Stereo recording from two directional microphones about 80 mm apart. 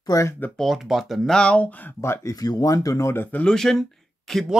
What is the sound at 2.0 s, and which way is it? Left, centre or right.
Speech, left.